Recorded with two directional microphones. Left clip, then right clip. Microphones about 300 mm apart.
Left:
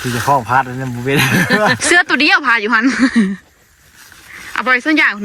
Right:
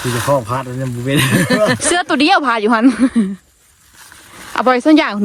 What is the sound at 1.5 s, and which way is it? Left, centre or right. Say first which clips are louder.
Speech: left 1 dB; right.